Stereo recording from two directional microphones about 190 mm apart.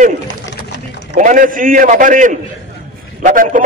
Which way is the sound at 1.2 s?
45° right (ahead or behind).